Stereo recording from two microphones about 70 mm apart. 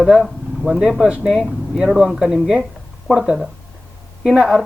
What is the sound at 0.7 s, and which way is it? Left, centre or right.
Speech, centre.